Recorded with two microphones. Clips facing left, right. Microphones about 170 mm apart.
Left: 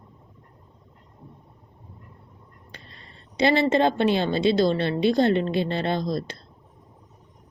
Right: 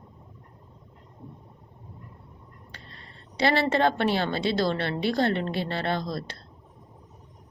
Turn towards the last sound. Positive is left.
turn(degrees=20)  # may be behind; listen again after turning